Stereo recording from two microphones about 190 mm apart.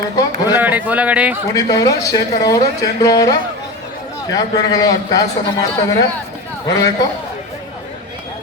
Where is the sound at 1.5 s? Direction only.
20° left (ahead or behind).